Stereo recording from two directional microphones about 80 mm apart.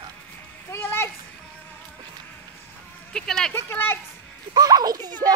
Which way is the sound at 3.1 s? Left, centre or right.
Centre.